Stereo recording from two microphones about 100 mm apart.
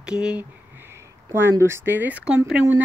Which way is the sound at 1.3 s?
20° right (ahead or behind).